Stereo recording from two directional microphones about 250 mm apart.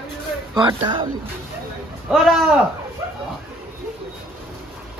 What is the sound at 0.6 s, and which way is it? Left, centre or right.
Speech, centre.